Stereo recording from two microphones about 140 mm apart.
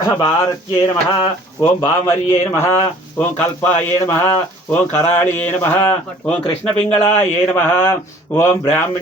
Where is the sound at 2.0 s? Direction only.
20° left (ahead or behind).